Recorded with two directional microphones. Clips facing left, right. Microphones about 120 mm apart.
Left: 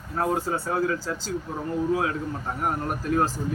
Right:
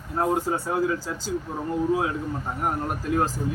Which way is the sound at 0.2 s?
20° right (ahead or behind).